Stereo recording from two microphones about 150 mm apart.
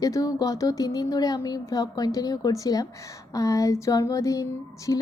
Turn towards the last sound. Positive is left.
turn(degrees=20)  # may be behind; listen again after turning